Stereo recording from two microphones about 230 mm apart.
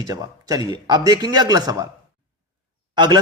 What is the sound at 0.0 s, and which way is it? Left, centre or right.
Speech, centre.